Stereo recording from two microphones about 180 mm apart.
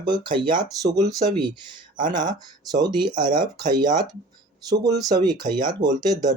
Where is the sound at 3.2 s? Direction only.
25° right (ahead or behind).